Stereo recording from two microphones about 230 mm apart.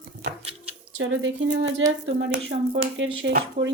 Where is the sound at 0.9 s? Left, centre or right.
Right.